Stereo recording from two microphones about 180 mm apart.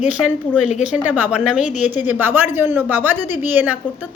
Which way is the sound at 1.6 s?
40° left (ahead or behind).